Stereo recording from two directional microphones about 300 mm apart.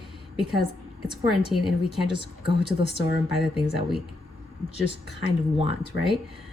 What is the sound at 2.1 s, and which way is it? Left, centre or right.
Speech, centre.